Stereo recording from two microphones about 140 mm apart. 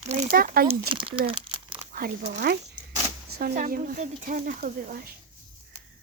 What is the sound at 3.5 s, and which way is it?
Speech, 70° right (ahead or behind).